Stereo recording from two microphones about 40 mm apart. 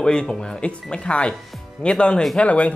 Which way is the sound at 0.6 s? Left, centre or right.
Left.